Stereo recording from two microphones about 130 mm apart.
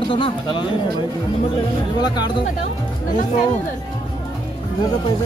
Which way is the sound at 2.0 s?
35° left (ahead or behind).